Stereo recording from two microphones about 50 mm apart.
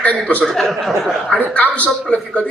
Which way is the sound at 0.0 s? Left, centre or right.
Left.